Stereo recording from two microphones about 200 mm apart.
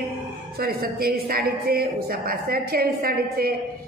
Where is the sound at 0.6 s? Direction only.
50° right (ahead or behind).